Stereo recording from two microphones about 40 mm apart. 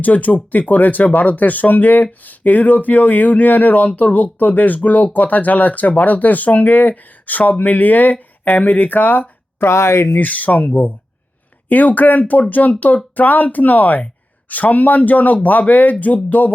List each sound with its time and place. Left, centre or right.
0.0 s speech: left
9.6 s speech: left
10.2 s speech: left